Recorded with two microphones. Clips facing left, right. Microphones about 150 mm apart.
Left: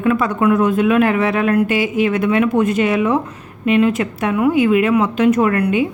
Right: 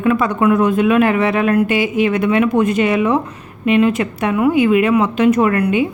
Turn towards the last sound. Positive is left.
turn(degrees=-10)  # may be behind; listen again after turning